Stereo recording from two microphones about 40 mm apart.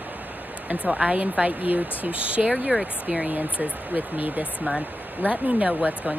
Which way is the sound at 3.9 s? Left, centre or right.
Right.